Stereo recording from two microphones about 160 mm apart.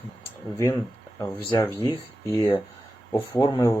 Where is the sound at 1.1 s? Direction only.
15° left (ahead or behind).